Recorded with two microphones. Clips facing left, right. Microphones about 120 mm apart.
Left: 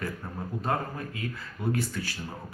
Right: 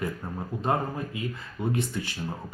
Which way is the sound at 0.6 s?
20° right (ahead or behind).